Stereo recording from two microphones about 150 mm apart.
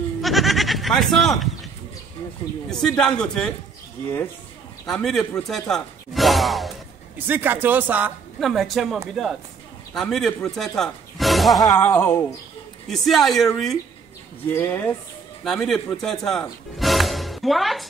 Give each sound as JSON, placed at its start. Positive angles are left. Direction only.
{"t": 0.2, "sound": "goat", "side_deg": 0}
{"t": 3.0, "sound": "speech", "side_deg": 5}
{"t": 4.8, "sound": "speech", "side_deg": 0}
{"t": 7.2, "sound": "speech", "side_deg": -15}
{"t": 8.4, "sound": "speech", "side_deg": 0}
{"t": 11.8, "sound": "speech", "side_deg": 15}
{"t": 12.9, "sound": "speech", "side_deg": 0}
{"t": 14.5, "sound": "speech", "side_deg": 15}
{"t": 15.4, "sound": "speech", "side_deg": 0}